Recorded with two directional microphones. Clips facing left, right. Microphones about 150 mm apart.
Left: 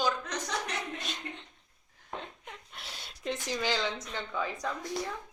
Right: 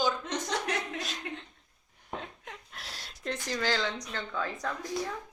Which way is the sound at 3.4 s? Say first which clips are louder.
Right 1 dB; 15° left (ahead or behind).